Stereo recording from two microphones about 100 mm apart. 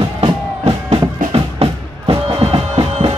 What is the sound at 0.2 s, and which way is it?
Music, 80° right.